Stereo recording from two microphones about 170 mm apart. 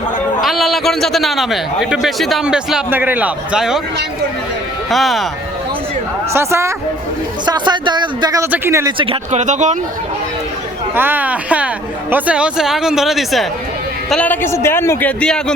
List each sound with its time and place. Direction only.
0.4 s a man's voice: centre (ahead or behind)
4.9 s a man's voice: centre (ahead or behind)
6.3 s speech: 15° right (ahead or behind)
8.4 s speech: 10° right (ahead or behind)
9.0 s speech: 40° right (ahead or behind)
10.9 s a man's voice: 10° right (ahead or behind); by 15.5 s 5° left (ahead or behind)